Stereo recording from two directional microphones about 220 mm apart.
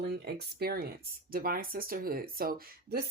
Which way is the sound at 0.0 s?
45° right (ahead or behind).